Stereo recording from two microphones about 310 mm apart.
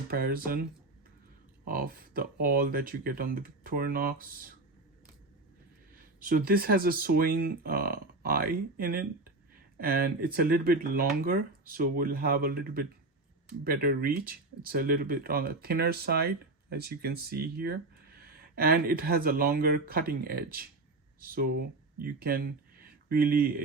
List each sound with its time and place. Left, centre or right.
0.1 s speech: right
1.6 s speech: right
6.1 s speech: right